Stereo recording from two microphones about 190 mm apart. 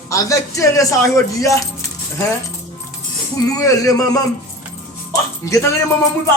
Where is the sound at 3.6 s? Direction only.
20° left (ahead or behind).